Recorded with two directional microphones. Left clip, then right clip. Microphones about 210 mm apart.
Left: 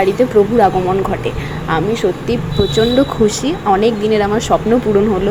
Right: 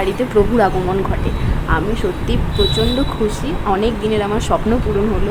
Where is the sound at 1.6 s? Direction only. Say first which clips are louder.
Left 4 dB; 15° left (ahead or behind).